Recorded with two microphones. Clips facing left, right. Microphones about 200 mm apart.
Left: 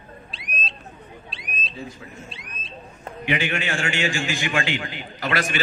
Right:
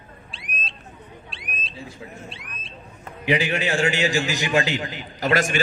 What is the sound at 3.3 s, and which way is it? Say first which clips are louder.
A man's voice: right 3 dB; 35° right (ahead or behind).